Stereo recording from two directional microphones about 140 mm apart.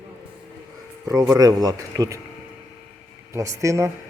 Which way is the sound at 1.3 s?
25° right (ahead or behind).